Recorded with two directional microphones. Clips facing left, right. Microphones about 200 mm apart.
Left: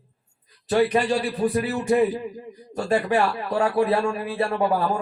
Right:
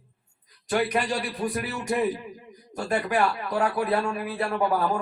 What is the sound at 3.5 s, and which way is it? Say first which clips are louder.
Speech: left 5 dB; 30° left (ahead or behind).